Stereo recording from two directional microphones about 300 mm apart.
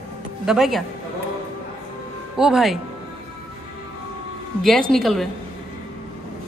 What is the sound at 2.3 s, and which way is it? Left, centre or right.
Speech, centre.